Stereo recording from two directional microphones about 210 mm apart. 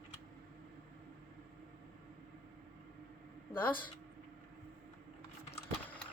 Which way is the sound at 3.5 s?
10° left (ahead or behind).